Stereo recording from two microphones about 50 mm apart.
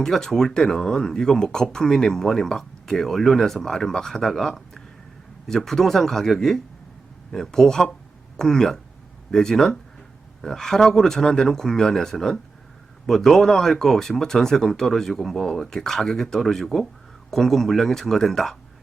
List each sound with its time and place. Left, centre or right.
0.0 s speech: centre